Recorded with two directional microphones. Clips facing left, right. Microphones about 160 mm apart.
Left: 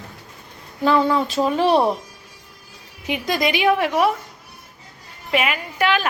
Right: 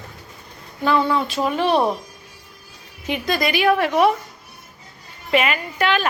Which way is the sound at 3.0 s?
15° left (ahead or behind).